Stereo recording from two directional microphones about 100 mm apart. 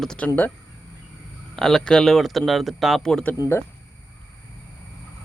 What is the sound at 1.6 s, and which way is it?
Speech, 5° left (ahead or behind).